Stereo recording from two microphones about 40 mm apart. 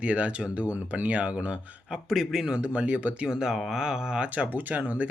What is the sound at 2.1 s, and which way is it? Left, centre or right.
Mantra, centre.